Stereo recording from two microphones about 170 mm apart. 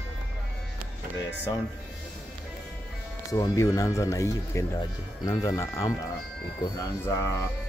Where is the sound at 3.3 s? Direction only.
20° left (ahead or behind).